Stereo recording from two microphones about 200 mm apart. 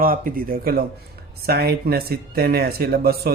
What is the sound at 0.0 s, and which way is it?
Speech, 45° right (ahead or behind).